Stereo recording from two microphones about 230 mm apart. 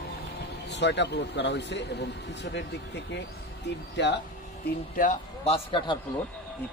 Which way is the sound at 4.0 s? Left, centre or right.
Left.